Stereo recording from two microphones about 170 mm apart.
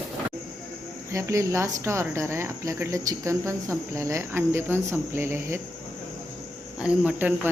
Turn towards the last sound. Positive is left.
turn(degrees=-10)  # may be behind; listen again after turning